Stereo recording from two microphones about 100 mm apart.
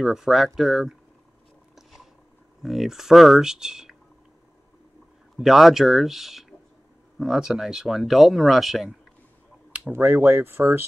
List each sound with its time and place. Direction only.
0.0 s speech: 5° right (ahead or behind)
1.8 s a sound: centre (ahead or behind)
2.6 s speech: centre (ahead or behind)
5.4 s speech: 5° right (ahead or behind)
9.7 s speech: 15° right (ahead or behind)